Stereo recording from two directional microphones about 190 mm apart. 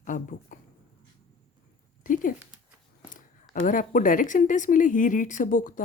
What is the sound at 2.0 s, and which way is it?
Speech, 45° left (ahead or behind).